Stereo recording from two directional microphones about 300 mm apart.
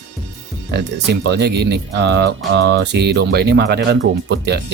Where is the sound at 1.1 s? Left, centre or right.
Right.